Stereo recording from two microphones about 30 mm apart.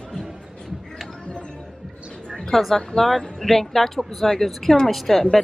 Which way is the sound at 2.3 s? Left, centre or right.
Centre.